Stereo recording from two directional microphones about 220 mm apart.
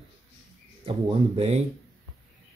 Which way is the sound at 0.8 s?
25° right (ahead or behind).